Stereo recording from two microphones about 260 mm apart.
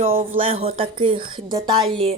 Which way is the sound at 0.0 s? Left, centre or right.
Right.